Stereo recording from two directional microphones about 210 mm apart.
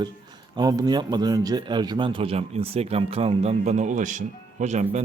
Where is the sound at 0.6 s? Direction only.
20° right (ahead or behind).